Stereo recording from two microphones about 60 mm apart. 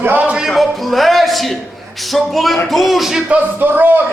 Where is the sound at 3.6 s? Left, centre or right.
Right.